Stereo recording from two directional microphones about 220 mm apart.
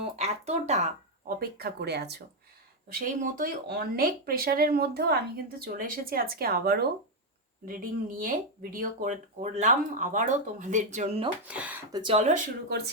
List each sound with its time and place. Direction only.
0.0 s speech: 30° right (ahead or behind)
11.4 s speech: 5° right (ahead or behind)
11.9 s speech: 20° right (ahead or behind)